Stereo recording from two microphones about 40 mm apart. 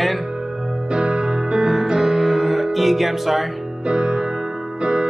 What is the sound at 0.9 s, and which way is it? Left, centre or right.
Music, right.